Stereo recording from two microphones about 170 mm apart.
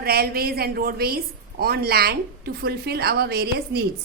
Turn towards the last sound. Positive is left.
turn(degrees=-65)  # may be behind; listen again after turning